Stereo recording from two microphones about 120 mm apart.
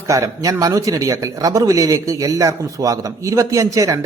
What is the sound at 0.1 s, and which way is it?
Speech, 25° right (ahead or behind).